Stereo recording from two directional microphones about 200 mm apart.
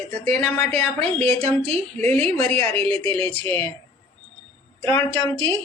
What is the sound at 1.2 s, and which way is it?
Speech, 30° right (ahead or behind).